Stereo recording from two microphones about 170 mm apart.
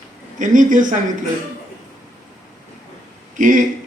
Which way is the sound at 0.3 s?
50° right (ahead or behind).